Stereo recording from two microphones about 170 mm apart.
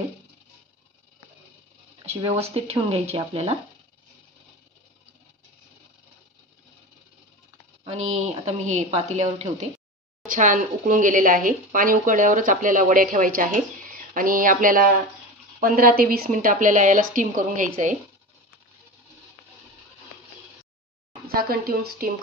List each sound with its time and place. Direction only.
2.0 s a woman's voice: 35° right (ahead or behind)
7.8 s a woman's voice: 40° right (ahead or behind)
21.3 s speech: 60° right (ahead or behind)